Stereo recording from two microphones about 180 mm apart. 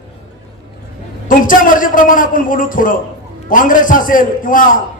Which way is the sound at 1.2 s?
50° left (ahead or behind).